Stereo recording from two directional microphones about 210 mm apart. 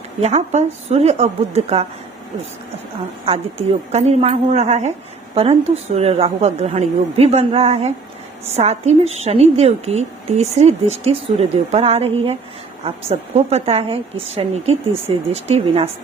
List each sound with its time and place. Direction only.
0.2 s a woman's voice: 35° right (ahead or behind)
3.9 s a woman's voice: 30° right (ahead or behind)